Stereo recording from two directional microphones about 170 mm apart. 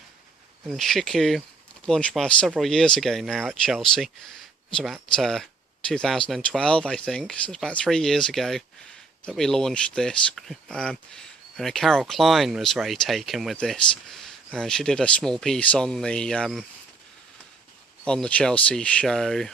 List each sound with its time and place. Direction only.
0.7 s speech: centre (ahead or behind)
18.0 s speech: 5° left (ahead or behind)